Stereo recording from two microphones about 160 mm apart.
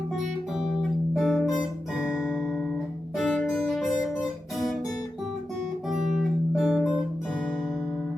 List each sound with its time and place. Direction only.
0.2 s music: centre (ahead or behind)
2.0 s guitar: 5° right (ahead or behind)
6.1 s music: centre (ahead or behind)